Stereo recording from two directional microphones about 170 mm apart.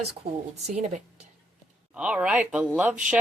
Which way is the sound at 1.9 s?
5° right (ahead or behind).